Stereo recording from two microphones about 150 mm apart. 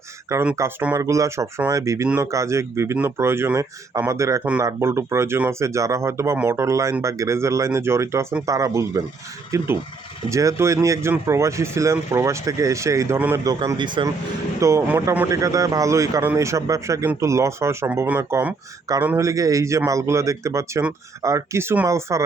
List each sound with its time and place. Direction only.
0.5 s speech: 15° right (ahead or behind)
13.4 s a man's voice: 25° right (ahead or behind)
14.6 s speech: 20° right (ahead or behind)